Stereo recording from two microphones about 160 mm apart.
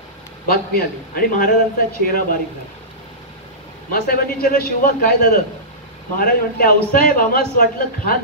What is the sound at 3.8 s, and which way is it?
A man's voice, 65° left (ahead or behind).